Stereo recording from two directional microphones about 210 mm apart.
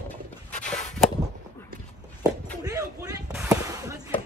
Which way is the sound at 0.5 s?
35° left (ahead or behind).